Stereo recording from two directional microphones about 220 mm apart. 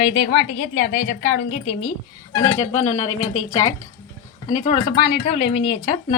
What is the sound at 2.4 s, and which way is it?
Speech, 70° left (ahead or behind).